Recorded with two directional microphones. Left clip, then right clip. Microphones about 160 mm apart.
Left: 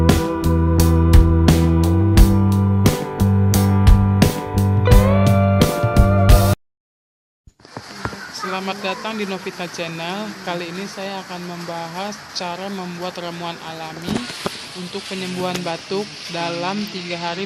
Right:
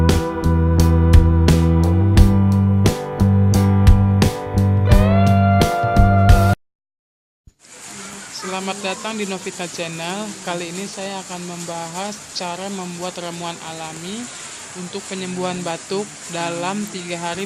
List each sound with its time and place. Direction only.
0.0 s music: centre (ahead or behind)
8.4 s speech: centre (ahead or behind)